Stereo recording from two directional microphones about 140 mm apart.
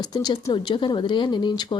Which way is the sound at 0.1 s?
25° left (ahead or behind).